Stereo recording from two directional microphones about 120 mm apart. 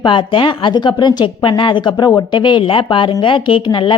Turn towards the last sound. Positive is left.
turn(degrees=40)  # may be behind; listen again after turning